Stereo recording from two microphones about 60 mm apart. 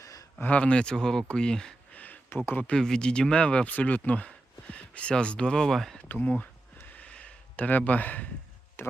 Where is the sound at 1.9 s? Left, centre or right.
Left.